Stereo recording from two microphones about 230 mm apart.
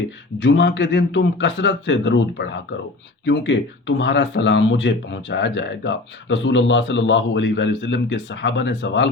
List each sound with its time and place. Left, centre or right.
0.4 s speech: left